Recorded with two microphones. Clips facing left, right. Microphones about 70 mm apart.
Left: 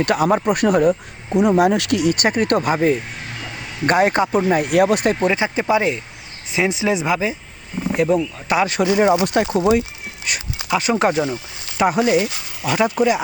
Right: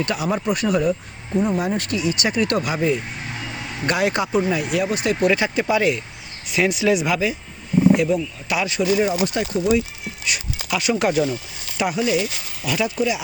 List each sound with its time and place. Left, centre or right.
0.0 s speech: left
1.4 s speech: left
3.8 s speech: left
4.4 s speech: left
5.2 s speech: left
7.9 s speech: left
11.9 s speech: left